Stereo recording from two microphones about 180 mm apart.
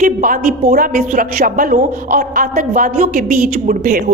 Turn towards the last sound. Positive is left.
turn(degrees=-50)  # may be behind; listen again after turning